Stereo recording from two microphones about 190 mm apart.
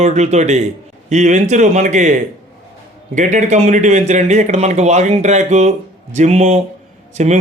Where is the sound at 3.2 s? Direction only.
40° right (ahead or behind).